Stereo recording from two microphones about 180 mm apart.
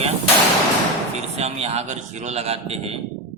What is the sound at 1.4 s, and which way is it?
A man's voice, 35° right (ahead or behind).